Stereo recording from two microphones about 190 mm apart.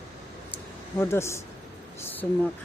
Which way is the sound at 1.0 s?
15° left (ahead or behind).